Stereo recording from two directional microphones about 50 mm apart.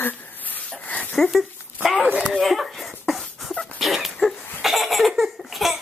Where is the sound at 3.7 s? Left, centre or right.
Centre.